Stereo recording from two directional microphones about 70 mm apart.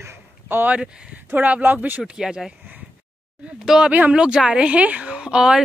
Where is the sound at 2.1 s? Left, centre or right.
Centre.